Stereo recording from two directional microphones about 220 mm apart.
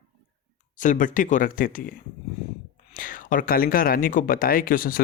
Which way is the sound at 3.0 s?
40° left (ahead or behind).